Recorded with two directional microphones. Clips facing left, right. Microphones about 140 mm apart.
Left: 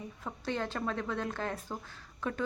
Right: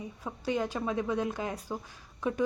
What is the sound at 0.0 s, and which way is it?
A woman's voice, 10° right (ahead or behind).